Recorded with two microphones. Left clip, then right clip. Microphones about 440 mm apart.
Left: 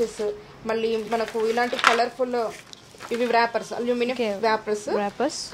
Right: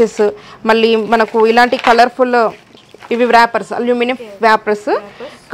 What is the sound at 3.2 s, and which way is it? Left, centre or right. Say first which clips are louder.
A woman's voice: right 12 dB; right.